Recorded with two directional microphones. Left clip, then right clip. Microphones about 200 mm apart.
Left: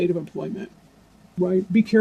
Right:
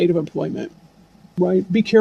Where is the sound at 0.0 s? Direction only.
50° right (ahead or behind).